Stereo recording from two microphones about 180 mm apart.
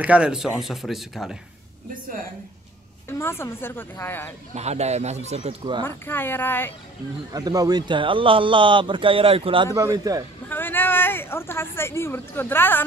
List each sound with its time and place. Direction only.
0.0 s speech: 5° right (ahead or behind)
3.1 s a woman's voice: 15° left (ahead or behind)
4.6 s speech: 35° right (ahead or behind)
5.9 s a woman's voice: 10° left (ahead or behind)
7.3 s speech: 20° right (ahead or behind)
9.8 s a man's voice: 20° right (ahead or behind)
10.5 s speech: 10° left (ahead or behind)